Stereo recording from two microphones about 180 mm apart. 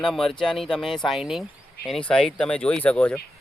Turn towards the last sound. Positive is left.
turn(degrees=5)  # may be behind; listen again after turning